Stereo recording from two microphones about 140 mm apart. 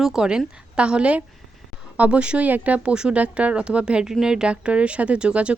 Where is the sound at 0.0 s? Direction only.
5° right (ahead or behind).